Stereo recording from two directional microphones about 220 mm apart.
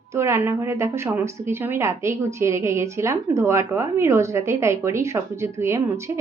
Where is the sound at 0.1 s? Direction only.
10° right (ahead or behind).